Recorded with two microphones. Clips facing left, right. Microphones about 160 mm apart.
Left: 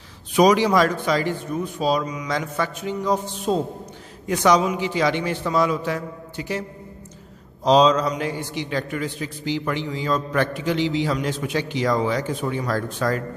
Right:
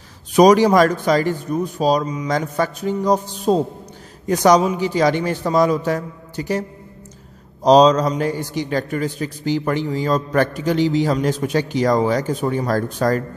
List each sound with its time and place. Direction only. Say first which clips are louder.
0.3 s a man's voice: right 5 dB; 45° right (ahead or behind)
7.6 s a man's voice: right 4 dB; 40° right (ahead or behind)